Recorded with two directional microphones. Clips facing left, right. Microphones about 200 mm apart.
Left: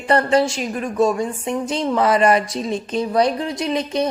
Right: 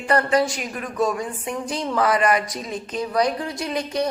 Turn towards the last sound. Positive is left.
turn(degrees=20)  # may be behind; listen again after turning